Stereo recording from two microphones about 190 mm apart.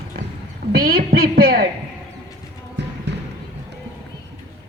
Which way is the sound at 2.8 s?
65° right (ahead or behind).